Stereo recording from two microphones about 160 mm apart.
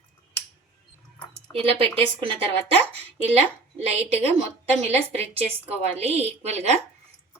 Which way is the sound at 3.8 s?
40° right (ahead or behind).